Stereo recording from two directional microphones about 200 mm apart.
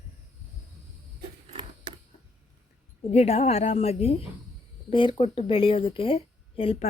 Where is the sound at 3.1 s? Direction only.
35° left (ahead or behind).